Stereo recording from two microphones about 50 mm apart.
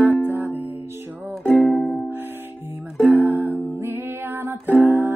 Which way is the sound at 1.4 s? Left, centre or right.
Left.